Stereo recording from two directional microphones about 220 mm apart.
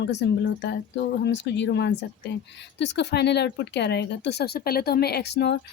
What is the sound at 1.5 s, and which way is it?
A woman's voice, 50° left (ahead or behind).